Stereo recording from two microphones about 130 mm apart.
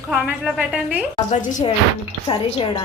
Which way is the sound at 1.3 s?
65° left (ahead or behind).